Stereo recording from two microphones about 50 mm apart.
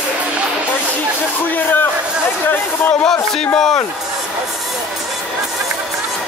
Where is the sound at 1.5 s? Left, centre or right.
Left.